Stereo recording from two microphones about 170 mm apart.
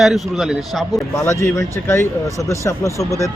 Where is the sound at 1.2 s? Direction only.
15° left (ahead or behind).